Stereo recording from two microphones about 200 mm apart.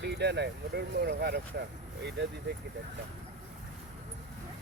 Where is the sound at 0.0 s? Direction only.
55° right (ahead or behind).